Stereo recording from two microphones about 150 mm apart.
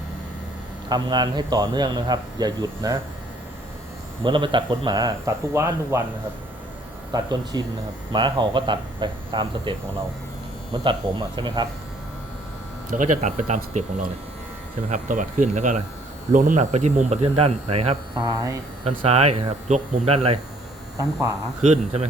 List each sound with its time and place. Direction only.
0.9 s speech: 25° right (ahead or behind)
4.2 s speech: 30° right (ahead or behind)
7.1 s speech: 25° right (ahead or behind)
11.3 s speech: 30° right (ahead or behind)
12.9 s speech: 55° right (ahead or behind)
14.8 s speech: 55° right (ahead or behind); by 18.6 s 25° right (ahead or behind)
18.9 s speech: 45° right (ahead or behind)
21.0 s speech: 25° right (ahead or behind)
21.6 s speech: 50° right (ahead or behind)